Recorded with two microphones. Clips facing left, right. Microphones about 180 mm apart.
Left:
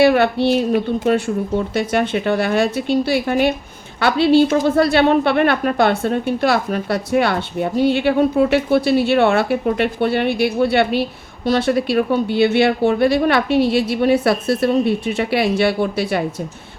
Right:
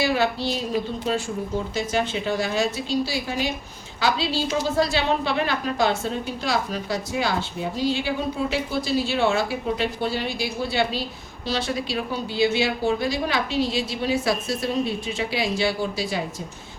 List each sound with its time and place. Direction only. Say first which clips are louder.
0.0 s a woman's voice: left 9 dB; 60° left (ahead or behind)